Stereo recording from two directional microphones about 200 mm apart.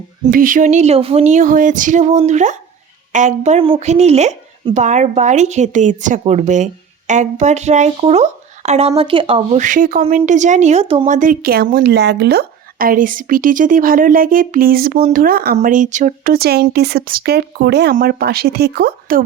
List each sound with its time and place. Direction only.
0.3 s a woman's voice: 45° right (ahead or behind)
11.0 s speech: 40° right (ahead or behind)